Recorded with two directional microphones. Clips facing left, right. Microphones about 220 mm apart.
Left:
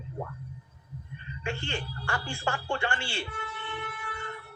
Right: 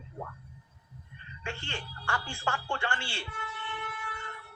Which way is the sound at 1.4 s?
15° left (ahead or behind).